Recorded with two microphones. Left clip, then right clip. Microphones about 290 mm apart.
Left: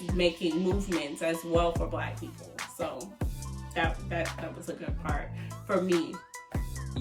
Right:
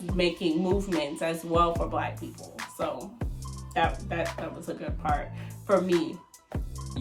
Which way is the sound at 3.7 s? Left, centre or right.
Centre.